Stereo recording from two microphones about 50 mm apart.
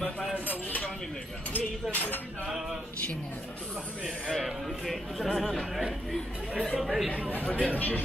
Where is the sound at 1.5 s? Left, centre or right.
Left.